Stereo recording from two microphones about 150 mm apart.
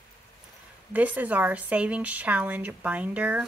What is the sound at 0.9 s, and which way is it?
Speech, 10° right (ahead or behind).